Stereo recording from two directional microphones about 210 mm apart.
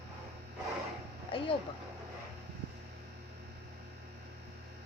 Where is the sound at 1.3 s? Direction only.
25° left (ahead or behind).